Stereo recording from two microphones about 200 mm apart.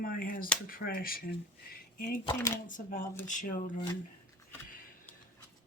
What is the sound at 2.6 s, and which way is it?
Speech, 40° left (ahead or behind).